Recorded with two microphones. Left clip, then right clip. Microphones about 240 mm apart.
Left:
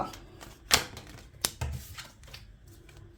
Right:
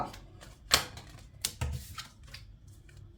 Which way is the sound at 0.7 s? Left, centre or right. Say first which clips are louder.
Left 2 dB; left.